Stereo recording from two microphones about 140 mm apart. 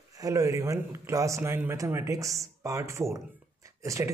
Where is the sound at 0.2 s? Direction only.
25° right (ahead or behind).